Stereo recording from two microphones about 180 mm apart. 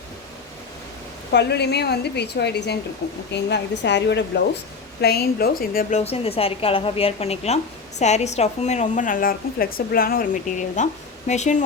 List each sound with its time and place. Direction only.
1.3 s a woman's voice: 65° left (ahead or behind)
4.9 s a woman's voice: 60° left (ahead or behind)
6.1 s a woman's voice: 35° left (ahead or behind)